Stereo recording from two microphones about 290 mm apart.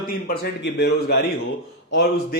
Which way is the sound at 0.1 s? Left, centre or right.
Left.